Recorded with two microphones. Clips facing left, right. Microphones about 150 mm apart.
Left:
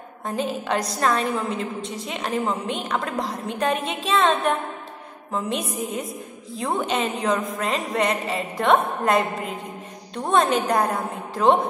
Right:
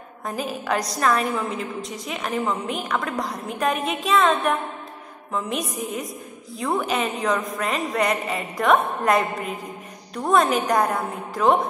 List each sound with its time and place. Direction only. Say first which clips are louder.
0.2 s a woman's voice: left 2 dB; 25° left (ahead or behind)